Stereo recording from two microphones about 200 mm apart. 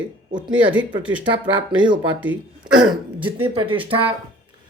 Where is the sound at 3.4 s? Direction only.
25° right (ahead or behind).